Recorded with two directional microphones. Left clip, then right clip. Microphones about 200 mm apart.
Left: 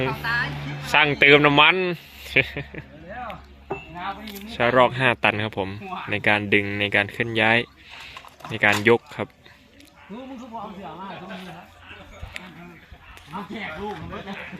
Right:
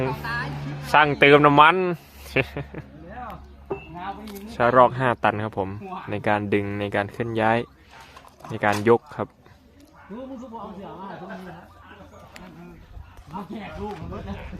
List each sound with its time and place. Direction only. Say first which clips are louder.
0.0 s speech: left 3 dB; centre (ahead or behind)
4.4 s speech: right 1 dB; centre (ahead or behind)
10.3 s speech: left 1 dB; 20° left (ahead or behind)